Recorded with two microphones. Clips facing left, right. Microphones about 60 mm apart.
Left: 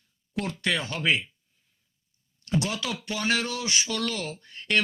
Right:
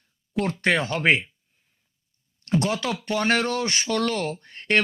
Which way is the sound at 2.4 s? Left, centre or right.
Right.